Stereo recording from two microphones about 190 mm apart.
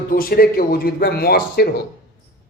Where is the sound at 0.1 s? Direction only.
50° left (ahead or behind).